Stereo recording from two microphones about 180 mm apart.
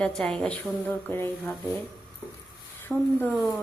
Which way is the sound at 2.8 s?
10° left (ahead or behind).